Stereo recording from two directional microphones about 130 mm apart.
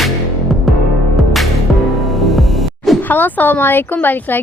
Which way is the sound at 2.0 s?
Centre (ahead or behind).